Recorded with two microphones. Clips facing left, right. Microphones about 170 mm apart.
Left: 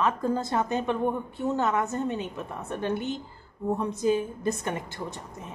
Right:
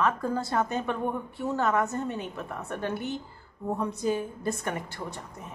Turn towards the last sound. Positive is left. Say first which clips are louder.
# left 1 dB
turn(degrees=20)  # may be behind; listen again after turning